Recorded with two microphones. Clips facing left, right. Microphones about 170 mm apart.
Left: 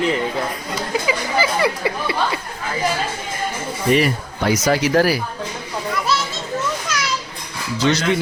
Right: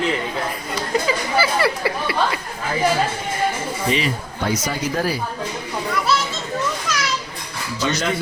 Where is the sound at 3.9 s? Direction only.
75° left (ahead or behind).